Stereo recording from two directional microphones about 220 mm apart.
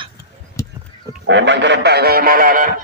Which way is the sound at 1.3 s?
55° right (ahead or behind).